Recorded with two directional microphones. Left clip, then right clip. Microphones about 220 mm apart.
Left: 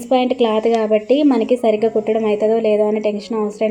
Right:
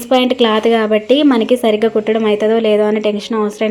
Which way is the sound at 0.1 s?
5° right (ahead or behind).